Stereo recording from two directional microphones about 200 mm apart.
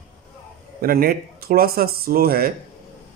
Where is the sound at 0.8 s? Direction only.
45° right (ahead or behind).